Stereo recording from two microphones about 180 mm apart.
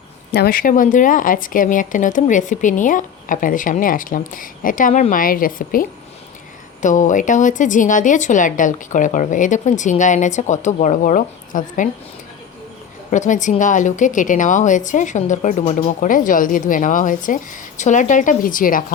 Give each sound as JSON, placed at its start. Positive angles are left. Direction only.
{"t": 0.3, "sound": "a woman's voice", "side_deg": 55}
{"t": 13.1, "sound": "a woman's voice", "side_deg": 45}